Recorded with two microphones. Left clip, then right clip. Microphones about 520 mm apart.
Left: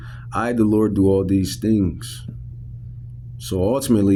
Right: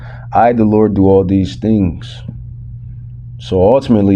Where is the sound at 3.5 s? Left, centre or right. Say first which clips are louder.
Right 10 dB; left.